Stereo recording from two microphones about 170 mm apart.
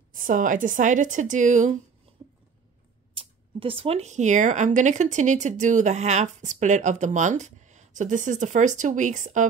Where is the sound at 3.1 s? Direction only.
30° right (ahead or behind).